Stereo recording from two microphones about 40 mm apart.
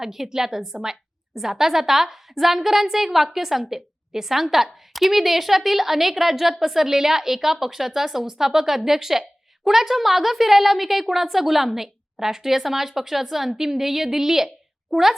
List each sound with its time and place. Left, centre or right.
0.0 s a woman's voice: centre